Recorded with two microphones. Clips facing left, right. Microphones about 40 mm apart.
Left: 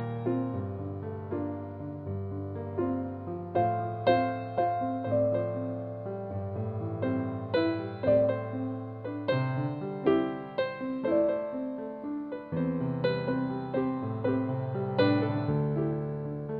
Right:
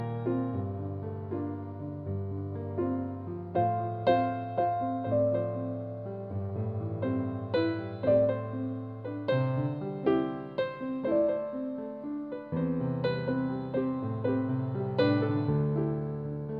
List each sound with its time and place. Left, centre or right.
3.5 s music: left
4.7 s music: centre
7.0 s music: left
12.5 s music: left